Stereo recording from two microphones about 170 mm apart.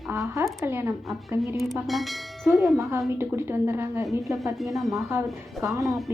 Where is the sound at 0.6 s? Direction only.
15° right (ahead or behind).